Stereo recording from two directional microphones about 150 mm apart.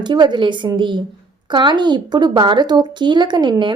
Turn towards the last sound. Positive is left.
turn(degrees=-30)  # may be behind; listen again after turning